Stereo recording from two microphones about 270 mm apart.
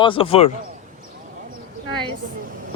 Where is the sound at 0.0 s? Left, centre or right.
Centre.